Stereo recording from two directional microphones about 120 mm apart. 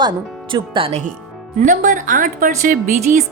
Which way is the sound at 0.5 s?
45° right (ahead or behind).